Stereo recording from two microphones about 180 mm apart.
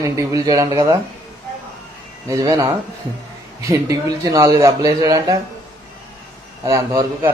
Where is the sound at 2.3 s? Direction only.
20° right (ahead or behind).